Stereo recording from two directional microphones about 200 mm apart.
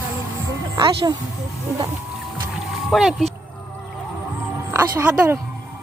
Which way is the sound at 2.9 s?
Centre (ahead or behind).